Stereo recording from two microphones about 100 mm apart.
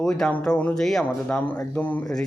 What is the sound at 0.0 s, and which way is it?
Speech, 5° left (ahead or behind).